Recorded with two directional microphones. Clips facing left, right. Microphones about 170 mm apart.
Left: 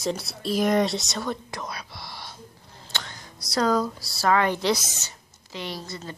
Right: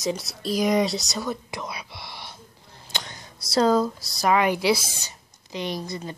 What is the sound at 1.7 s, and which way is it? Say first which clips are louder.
Whispering: even; 10° right (ahead or behind).